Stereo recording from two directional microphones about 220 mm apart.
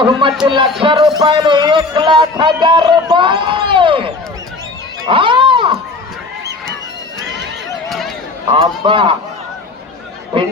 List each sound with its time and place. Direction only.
0.0 s a man's voice: 20° right (ahead or behind)
7.9 s a sound: centre (ahead or behind)
8.5 s a man's voice: 25° right (ahead or behind)